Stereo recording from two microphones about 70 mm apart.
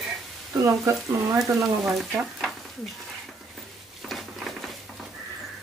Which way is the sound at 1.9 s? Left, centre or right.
Centre.